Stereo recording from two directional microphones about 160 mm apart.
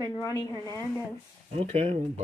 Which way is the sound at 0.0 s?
20° left (ahead or behind).